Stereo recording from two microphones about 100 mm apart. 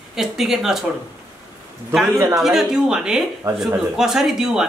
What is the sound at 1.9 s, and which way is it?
Speech, centre (ahead or behind).